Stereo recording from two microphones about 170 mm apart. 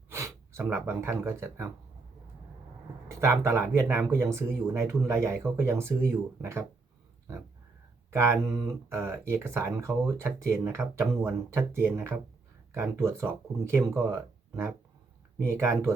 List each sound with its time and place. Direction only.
0.1 s speech: 15° right (ahead or behind)
3.2 s speech: 15° right (ahead or behind)
8.1 s speech: 15° right (ahead or behind)